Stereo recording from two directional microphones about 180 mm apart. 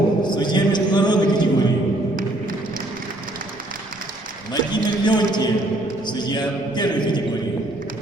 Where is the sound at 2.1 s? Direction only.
50° right (ahead or behind).